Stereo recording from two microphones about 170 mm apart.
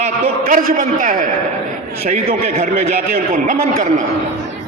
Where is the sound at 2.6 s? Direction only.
45° right (ahead or behind).